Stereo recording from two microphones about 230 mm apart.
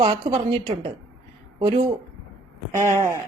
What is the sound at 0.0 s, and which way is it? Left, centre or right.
Speech, centre.